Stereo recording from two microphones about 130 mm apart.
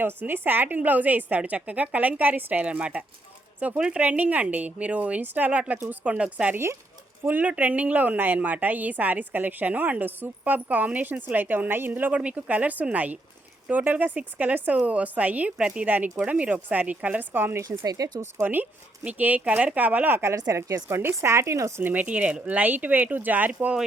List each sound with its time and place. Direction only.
0.0 s a woman's voice: 15° right (ahead or behind)
17.7 s speech: 30° right (ahead or behind)
18.3 s a woman's voice: 15° right (ahead or behind)